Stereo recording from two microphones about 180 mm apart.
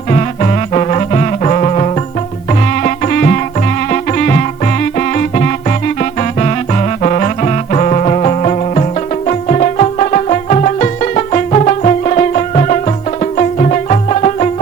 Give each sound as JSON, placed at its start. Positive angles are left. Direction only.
{"t": 0.1, "sound": "music", "side_deg": 40}
{"t": 2.8, "sound": "music", "side_deg": 50}